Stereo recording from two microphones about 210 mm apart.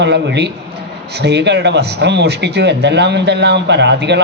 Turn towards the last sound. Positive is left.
turn(degrees=-55)  # may be behind; listen again after turning